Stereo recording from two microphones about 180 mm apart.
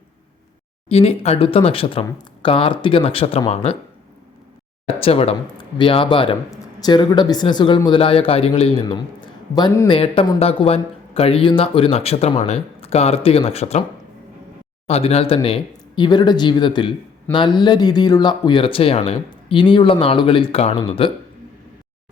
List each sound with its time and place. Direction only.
0.9 s speech: 35° left (ahead or behind)
4.9 s speech: 30° left (ahead or behind)
14.8 s speech: 35° left (ahead or behind)